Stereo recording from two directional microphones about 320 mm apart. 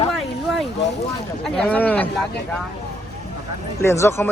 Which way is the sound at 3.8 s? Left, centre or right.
Centre.